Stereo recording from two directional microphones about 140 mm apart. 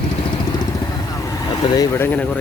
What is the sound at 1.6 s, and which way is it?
Speech, 35° left (ahead or behind).